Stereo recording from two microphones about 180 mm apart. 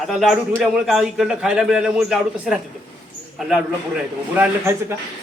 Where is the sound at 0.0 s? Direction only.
Centre (ahead or behind).